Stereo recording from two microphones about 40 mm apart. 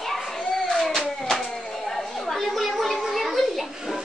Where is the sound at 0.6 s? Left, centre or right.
Centre.